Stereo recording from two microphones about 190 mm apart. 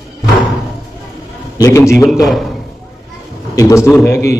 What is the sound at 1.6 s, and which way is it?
Speech, 15° left (ahead or behind).